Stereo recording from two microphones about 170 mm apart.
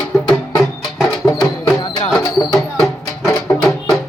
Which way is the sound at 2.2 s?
20° left (ahead or behind).